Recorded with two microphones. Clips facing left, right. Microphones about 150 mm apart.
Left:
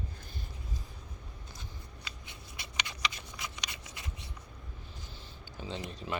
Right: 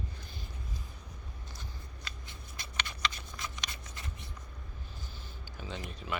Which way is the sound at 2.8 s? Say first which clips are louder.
Right 1 dB; 15° left (ahead or behind).